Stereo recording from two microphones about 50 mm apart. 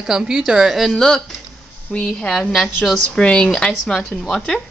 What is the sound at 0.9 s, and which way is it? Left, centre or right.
Speech, centre.